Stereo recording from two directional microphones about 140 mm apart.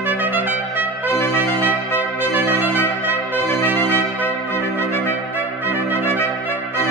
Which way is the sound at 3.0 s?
15° right (ahead or behind).